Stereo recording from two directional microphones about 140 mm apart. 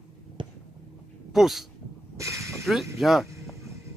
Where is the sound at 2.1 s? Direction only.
20° right (ahead or behind).